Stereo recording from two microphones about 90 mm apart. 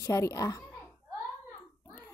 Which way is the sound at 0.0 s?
35° left (ahead or behind).